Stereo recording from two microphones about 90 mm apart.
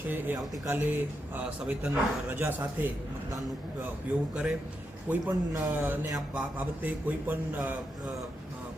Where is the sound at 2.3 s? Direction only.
20° right (ahead or behind).